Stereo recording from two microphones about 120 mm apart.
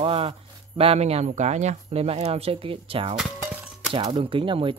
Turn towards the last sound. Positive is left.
turn(degrees=-45)  # may be behind; listen again after turning